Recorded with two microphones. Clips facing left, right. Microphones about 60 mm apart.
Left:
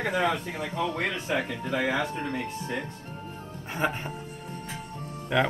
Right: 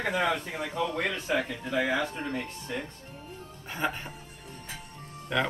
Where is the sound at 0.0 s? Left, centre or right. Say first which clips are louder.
Left 1 dB; centre.